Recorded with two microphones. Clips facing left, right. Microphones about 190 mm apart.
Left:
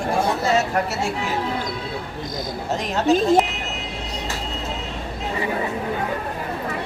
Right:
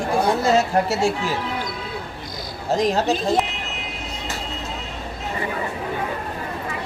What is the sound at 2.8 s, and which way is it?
Speech, 35° right (ahead or behind).